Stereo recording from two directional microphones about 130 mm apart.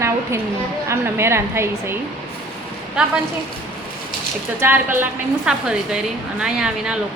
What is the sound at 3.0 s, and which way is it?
Speech, 5° right (ahead or behind).